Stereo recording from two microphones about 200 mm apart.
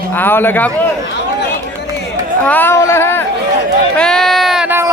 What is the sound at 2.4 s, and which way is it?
Speech, 10° left (ahead or behind).